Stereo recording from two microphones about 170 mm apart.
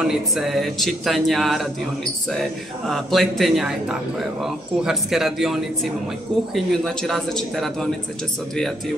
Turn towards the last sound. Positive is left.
turn(degrees=0)  # may be behind; listen again after turning